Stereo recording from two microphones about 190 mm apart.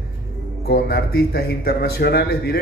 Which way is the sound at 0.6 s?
55° left (ahead or behind).